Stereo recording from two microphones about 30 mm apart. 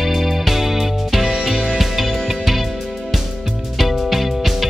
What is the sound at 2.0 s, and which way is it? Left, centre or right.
Music, centre.